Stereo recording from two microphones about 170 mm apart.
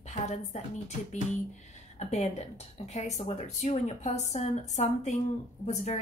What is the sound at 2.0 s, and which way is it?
A woman's voice, 40° left (ahead or behind).